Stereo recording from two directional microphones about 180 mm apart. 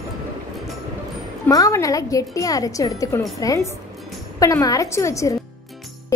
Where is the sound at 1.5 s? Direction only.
20° left (ahead or behind).